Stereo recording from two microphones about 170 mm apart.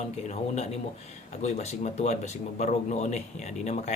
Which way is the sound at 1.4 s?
40° left (ahead or behind).